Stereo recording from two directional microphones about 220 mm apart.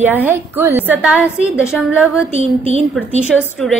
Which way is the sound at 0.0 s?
10° right (ahead or behind).